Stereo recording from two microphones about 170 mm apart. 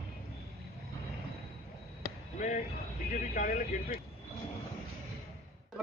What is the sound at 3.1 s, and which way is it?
Speech, 50° left (ahead or behind).